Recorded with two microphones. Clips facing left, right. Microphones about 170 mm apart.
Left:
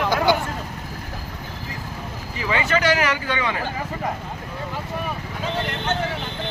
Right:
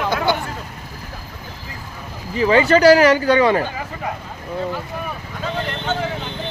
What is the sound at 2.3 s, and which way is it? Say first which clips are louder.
Speech: right 9 dB; 35° right (ahead or behind).